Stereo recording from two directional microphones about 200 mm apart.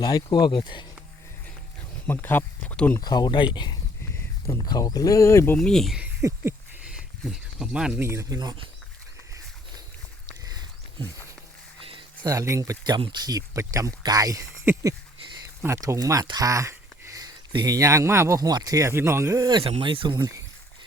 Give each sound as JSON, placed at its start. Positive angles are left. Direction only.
{"t": 0.0, "sound": "speech", "side_deg": 20}
{"t": 2.0, "sound": "speech", "side_deg": 10}
{"t": 3.0, "sound": "speech", "side_deg": 20}
{"t": 5.5, "sound": "speech", "side_deg": 5}
{"t": 6.2, "sound": "a sound", "side_deg": -15}
{"t": 7.3, "sound": "speech", "side_deg": -5}
{"t": 10.4, "sound": "a sound", "side_deg": -20}
{"t": 11.8, "sound": "speech", "side_deg": -25}